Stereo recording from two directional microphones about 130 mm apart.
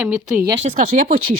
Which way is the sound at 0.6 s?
60° right (ahead or behind).